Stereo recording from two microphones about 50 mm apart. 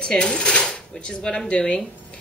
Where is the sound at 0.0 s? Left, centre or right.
Centre.